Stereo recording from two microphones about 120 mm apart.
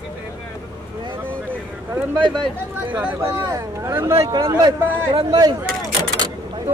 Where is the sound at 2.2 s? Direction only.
40° right (ahead or behind).